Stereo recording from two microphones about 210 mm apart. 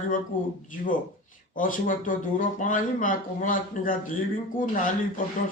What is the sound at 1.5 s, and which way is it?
A man's voice, 40° left (ahead or behind).